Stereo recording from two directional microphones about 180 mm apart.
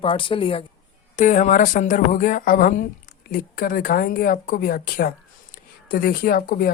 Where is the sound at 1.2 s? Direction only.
45° left (ahead or behind).